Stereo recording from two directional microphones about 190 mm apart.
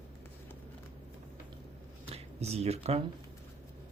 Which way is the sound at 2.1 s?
35° right (ahead or behind).